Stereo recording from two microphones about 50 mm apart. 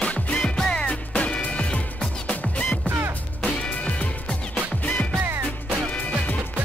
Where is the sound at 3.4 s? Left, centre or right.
Left.